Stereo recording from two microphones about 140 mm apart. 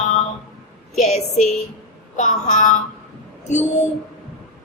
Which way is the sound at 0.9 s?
55° left (ahead or behind).